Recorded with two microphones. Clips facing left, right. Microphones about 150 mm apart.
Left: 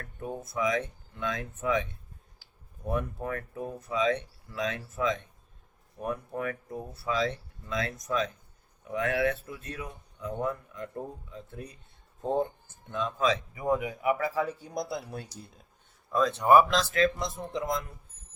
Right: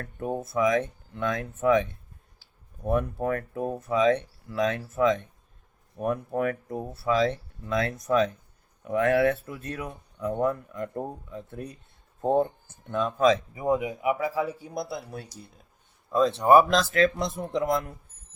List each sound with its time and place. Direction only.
0.0 s speech: 50° right (ahead or behind)
2.8 s speech: 50° right (ahead or behind)
12.9 s speech: 55° right (ahead or behind)
13.5 s speech: 25° right (ahead or behind); by 15.3 s centre (ahead or behind)
16.1 s speech: 30° right (ahead or behind); by 17.9 s 65° right (ahead or behind)